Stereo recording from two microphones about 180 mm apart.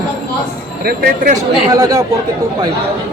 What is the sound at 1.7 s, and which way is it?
Speech, 20° right (ahead or behind).